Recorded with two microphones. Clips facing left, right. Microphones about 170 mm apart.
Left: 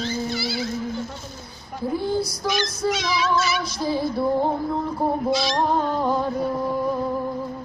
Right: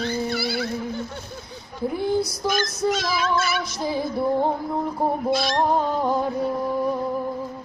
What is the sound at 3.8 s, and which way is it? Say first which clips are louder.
Female singing: left 2 dB; 15° right (ahead or behind).